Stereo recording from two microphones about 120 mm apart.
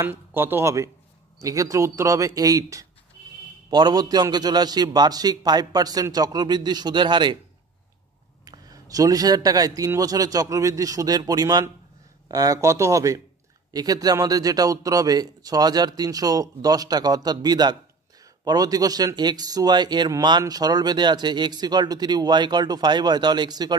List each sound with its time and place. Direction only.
0.0 s speech: 20° right (ahead or behind); by 7.3 s 40° right (ahead or behind)
8.5 s speech: 30° right (ahead or behind)